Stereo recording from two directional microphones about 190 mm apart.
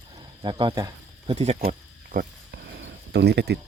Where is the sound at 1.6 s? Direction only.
50° right (ahead or behind).